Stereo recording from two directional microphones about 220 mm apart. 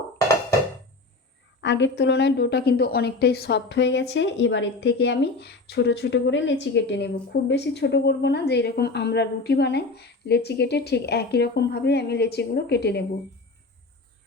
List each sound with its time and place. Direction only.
1.6 s a woman's voice: 55° left (ahead or behind)